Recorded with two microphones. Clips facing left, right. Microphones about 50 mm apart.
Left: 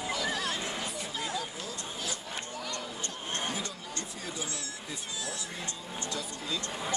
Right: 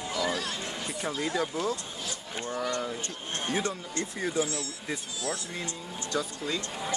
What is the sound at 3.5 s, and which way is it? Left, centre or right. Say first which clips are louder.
Speech: right 7 dB; right.